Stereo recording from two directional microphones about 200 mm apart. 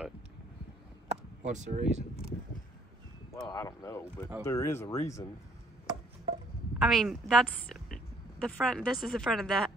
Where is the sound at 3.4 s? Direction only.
15° left (ahead or behind).